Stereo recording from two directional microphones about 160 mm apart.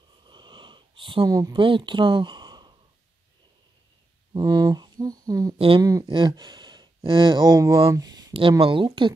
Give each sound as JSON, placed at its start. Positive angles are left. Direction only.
{"t": 0.2, "sound": "a sound", "side_deg": -30}
{"t": 4.3, "sound": "speech", "side_deg": -25}
{"t": 8.3, "sound": "speech", "side_deg": -35}